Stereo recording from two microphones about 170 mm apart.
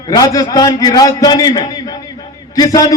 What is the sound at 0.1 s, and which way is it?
A man's voice, 20° left (ahead or behind).